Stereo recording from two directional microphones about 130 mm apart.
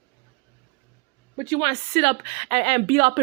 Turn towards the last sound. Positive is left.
turn(degrees=-45)  # may be behind; listen again after turning